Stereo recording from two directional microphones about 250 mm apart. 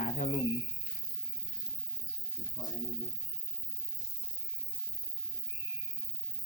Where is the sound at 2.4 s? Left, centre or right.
Centre.